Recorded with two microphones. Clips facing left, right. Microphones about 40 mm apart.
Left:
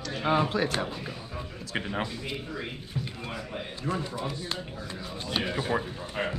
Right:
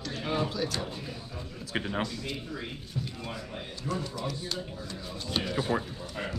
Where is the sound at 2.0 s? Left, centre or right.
Left.